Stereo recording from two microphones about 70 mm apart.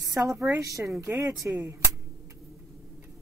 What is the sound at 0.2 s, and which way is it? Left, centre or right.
Speech, right.